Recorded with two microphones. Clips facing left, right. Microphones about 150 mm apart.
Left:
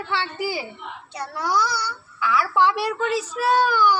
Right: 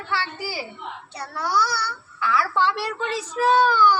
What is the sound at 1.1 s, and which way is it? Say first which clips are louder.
A child's voice: left 1 dB; 15° left (ahead or behind).